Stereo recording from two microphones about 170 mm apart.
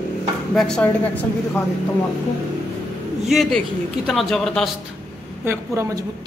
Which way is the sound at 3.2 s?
Centre (ahead or behind).